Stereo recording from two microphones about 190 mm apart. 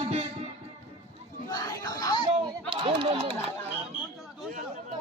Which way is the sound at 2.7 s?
30° right (ahead or behind).